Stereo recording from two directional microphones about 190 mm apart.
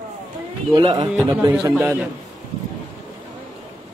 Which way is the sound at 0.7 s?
25° right (ahead or behind).